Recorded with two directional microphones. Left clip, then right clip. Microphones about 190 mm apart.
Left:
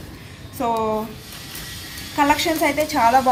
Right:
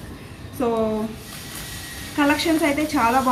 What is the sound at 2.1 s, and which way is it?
Speech, 50° left (ahead or behind).